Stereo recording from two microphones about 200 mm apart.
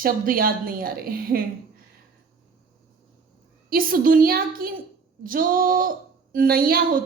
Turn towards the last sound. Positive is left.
turn(degrees=-45)  # may be behind; listen again after turning